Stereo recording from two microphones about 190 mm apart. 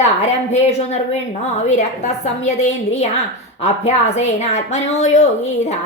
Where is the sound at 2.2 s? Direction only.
35° left (ahead or behind).